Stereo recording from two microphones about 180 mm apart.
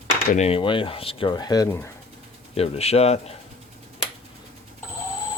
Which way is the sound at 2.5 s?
35° left (ahead or behind).